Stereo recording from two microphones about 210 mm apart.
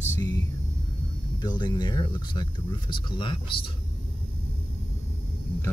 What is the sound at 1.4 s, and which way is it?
Speech, 20° left (ahead or behind).